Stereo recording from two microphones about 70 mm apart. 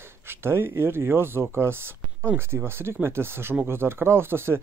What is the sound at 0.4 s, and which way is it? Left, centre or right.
Speech, right.